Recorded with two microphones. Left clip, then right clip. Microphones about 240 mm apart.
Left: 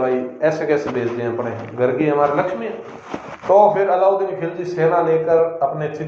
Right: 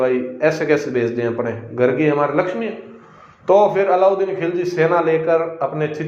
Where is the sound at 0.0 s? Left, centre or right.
Right.